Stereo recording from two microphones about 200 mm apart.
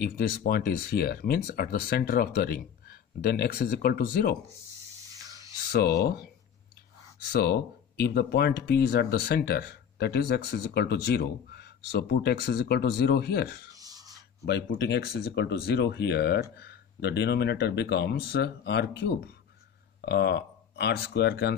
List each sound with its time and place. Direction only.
0.0 s speech: 50° left (ahead or behind)
5.7 s speech: 55° left (ahead or behind)
7.3 s speech: 55° left (ahead or behind)
13.7 s a sound: 20° right (ahead or behind)
14.4 s speech: 55° left (ahead or behind)